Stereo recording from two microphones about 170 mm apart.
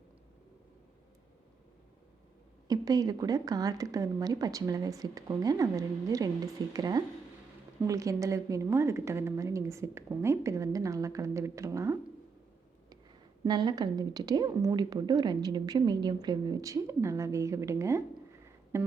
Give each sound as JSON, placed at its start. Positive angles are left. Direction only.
{"t": 2.6, "sound": "a woman's voice", "side_deg": -20}
{"t": 13.4, "sound": "a woman's voice", "side_deg": -25}
{"t": 18.4, "sound": "a sound", "side_deg": -15}